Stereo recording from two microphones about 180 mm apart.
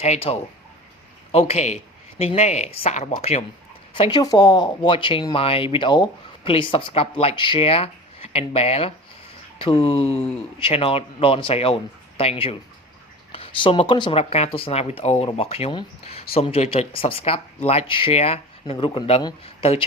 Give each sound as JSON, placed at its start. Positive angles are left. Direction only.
{"t": 0.0, "sound": "speech", "side_deg": 35}